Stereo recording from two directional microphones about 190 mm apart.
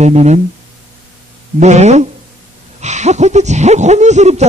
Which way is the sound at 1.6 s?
35° right (ahead or behind).